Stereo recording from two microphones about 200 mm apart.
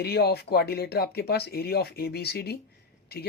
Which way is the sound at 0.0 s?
55° left (ahead or behind).